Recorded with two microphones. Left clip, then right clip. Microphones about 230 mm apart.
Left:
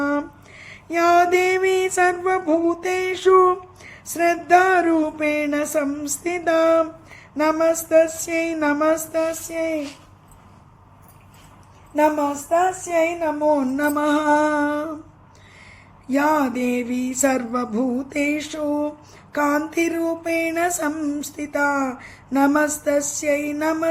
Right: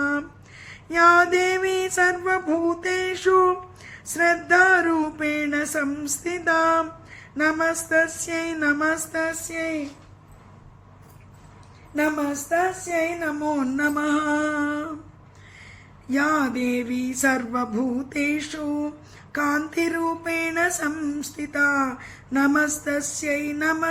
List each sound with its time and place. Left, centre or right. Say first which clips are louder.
0.0 s female singing: left 2 dB; centre
11.9 s female singing: left 5 dB; centre
16.0 s female singing: left 3 dB; centre